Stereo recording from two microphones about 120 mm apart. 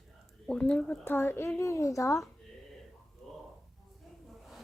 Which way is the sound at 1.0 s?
20° left (ahead or behind).